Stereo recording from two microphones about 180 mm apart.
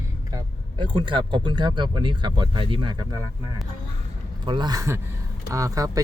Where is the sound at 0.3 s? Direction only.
25° right (ahead or behind).